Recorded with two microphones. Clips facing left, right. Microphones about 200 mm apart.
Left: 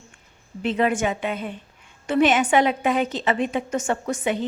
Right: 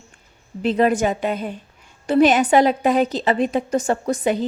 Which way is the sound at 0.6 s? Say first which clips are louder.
Right 4 dB; 35° right (ahead or behind).